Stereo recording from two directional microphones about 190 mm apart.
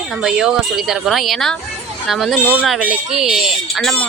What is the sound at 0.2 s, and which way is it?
Speech, 5° right (ahead or behind).